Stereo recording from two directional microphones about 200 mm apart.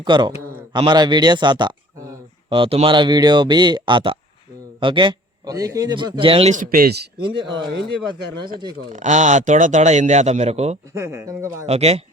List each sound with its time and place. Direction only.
0.0 s a man's voice: 20° right (ahead or behind); by 7.0 s 50° right (ahead or behind)
7.2 s a man's voice: 25° right (ahead or behind)
8.9 s speech: 35° right (ahead or behind)
10.9 s speech: 15° right (ahead or behind)
11.6 s speech: 30° right (ahead or behind)